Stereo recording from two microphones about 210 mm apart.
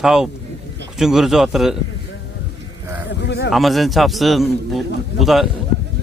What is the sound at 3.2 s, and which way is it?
Speech, 50° left (ahead or behind).